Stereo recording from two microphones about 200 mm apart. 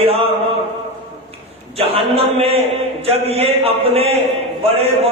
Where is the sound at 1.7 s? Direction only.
30° right (ahead or behind).